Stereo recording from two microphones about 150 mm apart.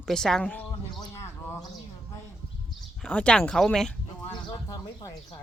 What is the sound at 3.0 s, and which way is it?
Speech, 5° left (ahead or behind).